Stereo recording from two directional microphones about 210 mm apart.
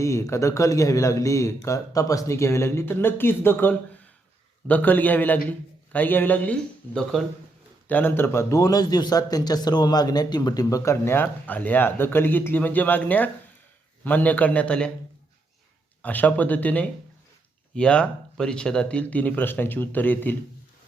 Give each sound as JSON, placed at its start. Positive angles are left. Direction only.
{"t": 0.0, "sound": "a man's voice", "side_deg": 15}
{"t": 16.0, "sound": "a man's voice", "side_deg": 5}